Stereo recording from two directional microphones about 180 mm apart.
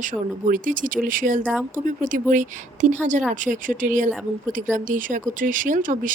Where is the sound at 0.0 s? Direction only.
45° right (ahead or behind).